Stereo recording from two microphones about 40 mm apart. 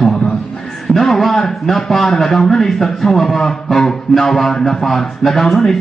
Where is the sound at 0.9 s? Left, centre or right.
Centre.